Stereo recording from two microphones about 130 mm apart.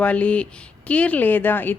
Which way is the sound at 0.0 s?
10° left (ahead or behind).